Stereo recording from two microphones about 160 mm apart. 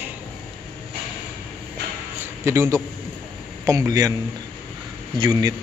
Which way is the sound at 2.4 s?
15° right (ahead or behind).